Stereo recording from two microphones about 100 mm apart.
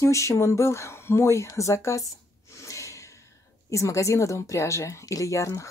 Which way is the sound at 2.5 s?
30° left (ahead or behind).